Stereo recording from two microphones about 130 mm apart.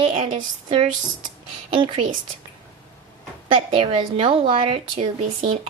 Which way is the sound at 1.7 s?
40° right (ahead or behind).